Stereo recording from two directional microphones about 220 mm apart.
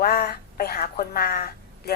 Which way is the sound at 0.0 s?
45° left (ahead or behind).